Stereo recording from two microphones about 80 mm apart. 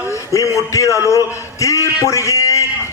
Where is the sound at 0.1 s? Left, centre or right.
Left.